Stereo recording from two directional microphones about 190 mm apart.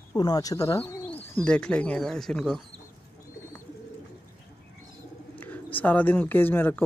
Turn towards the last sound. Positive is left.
turn(degrees=10)  # may be behind; listen again after turning